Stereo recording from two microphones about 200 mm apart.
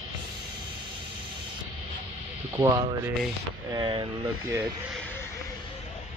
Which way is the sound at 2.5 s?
15° right (ahead or behind).